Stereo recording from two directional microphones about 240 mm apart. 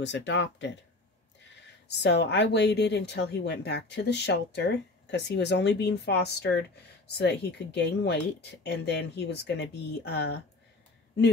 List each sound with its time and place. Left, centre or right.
0.0 s speech: left
1.9 s speech: left